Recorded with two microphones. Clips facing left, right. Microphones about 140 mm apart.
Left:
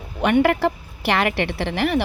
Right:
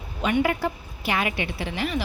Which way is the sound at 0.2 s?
70° left (ahead or behind).